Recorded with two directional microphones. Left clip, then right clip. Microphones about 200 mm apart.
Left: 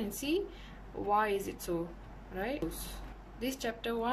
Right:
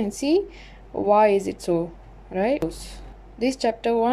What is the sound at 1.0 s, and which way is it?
Speech, 25° right (ahead or behind).